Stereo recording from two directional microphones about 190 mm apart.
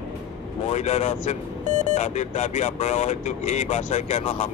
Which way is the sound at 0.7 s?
35° left (ahead or behind).